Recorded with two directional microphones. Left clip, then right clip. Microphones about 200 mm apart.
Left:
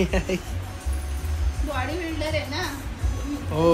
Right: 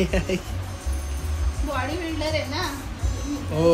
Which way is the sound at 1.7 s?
20° right (ahead or behind).